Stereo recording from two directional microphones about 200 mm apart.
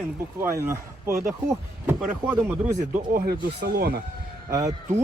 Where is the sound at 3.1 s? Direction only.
50° right (ahead or behind).